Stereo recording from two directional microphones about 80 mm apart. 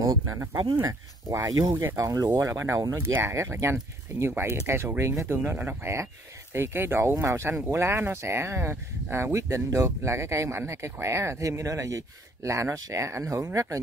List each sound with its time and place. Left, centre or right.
0.0 s speech: right